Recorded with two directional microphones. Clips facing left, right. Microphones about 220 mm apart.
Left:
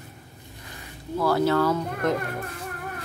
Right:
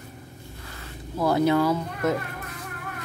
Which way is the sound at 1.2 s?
20° right (ahead or behind).